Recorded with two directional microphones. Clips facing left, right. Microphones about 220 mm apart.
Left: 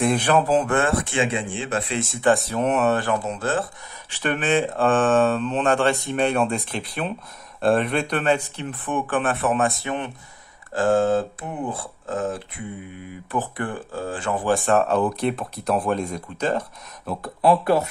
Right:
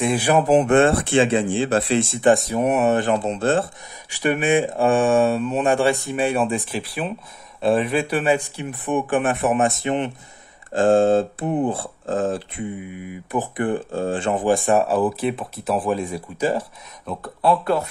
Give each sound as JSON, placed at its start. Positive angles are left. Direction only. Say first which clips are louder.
{"t": 0.0, "sound": "speech", "louder": "right 1 dB", "side_deg": -5}
{"t": 2.2, "sound": "speech", "louder": "right 1 dB", "side_deg": -15}
{"t": 4.1, "sound": "speech", "louder": "right 3 dB", "side_deg": -10}
{"t": 13.0, "sound": "speech", "louder": "right 2 dB", "side_deg": -15}
{"t": 14.7, "sound": "speech", "louder": "right 1 dB", "side_deg": -10}
{"t": 17.0, "sound": "speech", "louder": "left 1 dB", "side_deg": 5}